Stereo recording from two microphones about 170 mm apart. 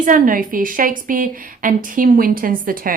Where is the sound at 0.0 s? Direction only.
55° right (ahead or behind).